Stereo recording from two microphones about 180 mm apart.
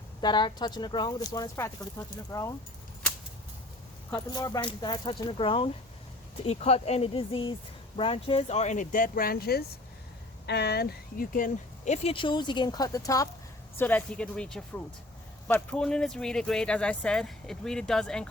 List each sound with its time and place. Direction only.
0.2 s speech: 25° left (ahead or behind)
4.1 s speech: 20° left (ahead or behind); by 11.9 s 50° left (ahead or behind)
12.0 s speech: 30° left (ahead or behind); by 18.3 s 5° left (ahead or behind)